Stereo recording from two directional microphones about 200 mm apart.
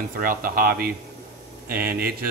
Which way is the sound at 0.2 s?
45° right (ahead or behind).